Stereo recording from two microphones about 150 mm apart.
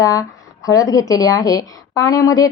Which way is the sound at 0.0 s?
20° left (ahead or behind).